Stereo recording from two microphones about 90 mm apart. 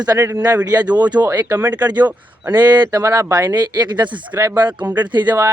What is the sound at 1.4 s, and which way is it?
Speech, 45° right (ahead or behind).